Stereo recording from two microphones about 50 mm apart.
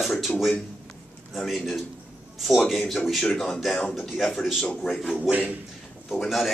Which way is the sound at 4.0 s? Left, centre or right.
Centre.